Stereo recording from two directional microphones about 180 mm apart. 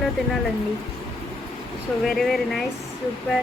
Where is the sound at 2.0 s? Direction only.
Centre (ahead or behind).